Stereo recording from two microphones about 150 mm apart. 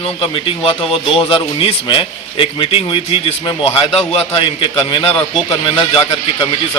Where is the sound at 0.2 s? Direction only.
35° left (ahead or behind).